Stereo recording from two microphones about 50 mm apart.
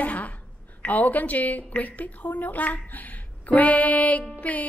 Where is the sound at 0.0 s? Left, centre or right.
Left.